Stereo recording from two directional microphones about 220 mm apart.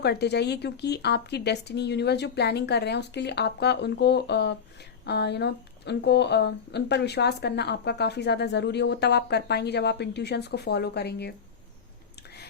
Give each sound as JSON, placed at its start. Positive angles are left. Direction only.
{"t": 0.0, "sound": "speech", "side_deg": 50}